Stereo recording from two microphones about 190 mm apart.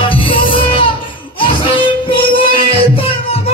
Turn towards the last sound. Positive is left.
turn(degrees=30)  # may be behind; listen again after turning